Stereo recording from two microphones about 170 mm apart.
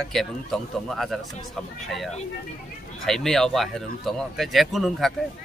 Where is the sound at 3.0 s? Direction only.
Centre (ahead or behind).